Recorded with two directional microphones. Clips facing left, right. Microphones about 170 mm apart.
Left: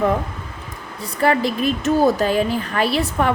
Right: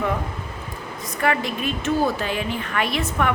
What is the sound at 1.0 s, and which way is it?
A woman's voice, 35° left (ahead or behind).